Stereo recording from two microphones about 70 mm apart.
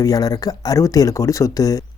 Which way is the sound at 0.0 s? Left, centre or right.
Left.